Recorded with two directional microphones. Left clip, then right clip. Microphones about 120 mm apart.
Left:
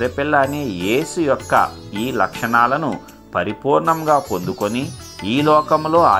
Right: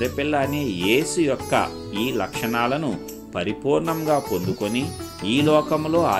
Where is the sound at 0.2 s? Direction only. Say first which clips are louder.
Left 7 dB; 10° right (ahead or behind).